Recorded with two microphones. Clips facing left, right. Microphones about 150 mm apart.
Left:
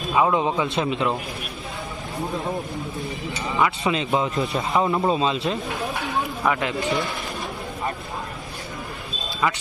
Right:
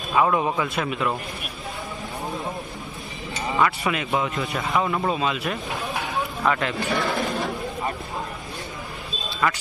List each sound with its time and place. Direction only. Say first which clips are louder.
0.1 s a man's voice: left 1 dB; 15° left (ahead or behind)
3.5 s a man's voice: left 1 dB; 20° left (ahead or behind)
6.4 s speech: right 1 dB; 15° left (ahead or behind)
9.4 s speech: even; 15° left (ahead or behind)